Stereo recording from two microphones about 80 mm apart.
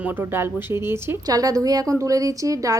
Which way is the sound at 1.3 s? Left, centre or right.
Right.